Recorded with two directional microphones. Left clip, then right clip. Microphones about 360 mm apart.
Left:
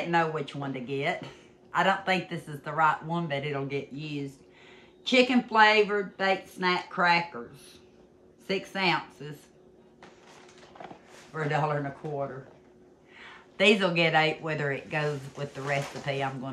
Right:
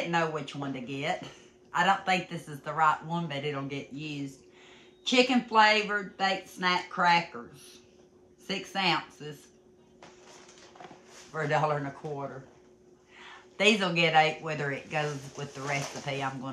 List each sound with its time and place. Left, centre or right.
0.1 s speech: centre
8.5 s speech: centre
10.8 s a sound: centre
11.3 s speech: centre
13.2 s speech: centre